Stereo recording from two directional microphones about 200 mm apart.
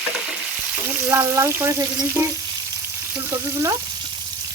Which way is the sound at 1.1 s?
15° right (ahead or behind).